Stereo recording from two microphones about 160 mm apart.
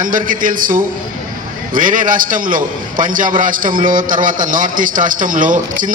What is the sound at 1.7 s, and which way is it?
A man's voice, 55° right (ahead or behind).